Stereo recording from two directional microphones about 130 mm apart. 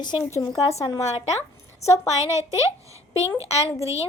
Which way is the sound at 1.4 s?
25° left (ahead or behind).